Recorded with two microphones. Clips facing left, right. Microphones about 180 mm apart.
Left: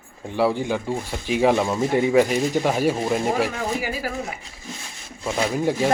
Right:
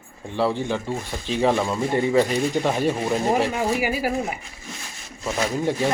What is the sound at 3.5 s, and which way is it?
Speech, 15° right (ahead or behind).